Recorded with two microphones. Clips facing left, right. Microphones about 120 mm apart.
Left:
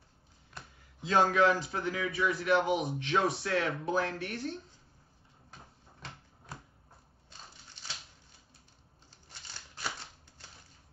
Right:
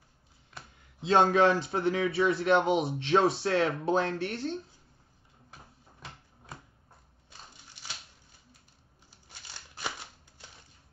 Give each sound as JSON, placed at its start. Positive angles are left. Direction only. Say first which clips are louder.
{"t": 1.0, "sound": "a man's voice", "louder": "right 3 dB", "side_deg": -25}